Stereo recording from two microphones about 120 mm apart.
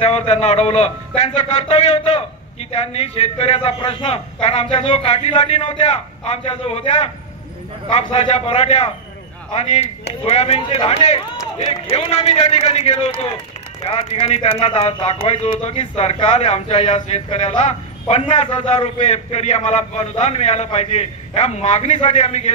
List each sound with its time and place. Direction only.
0.0 s a man's voice: 60° left (ahead or behind)